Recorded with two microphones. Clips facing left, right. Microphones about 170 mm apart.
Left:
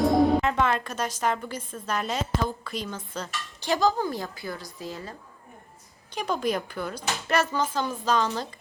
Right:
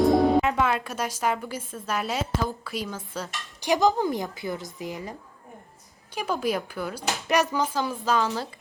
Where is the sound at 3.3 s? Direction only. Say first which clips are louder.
Right 3 dB; 15° right (ahead or behind).